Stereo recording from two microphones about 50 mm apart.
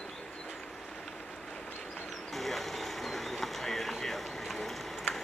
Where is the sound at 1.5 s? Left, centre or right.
Centre.